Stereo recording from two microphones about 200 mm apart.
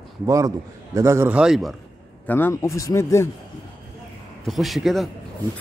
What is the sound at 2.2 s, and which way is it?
Speech, 10° left (ahead or behind).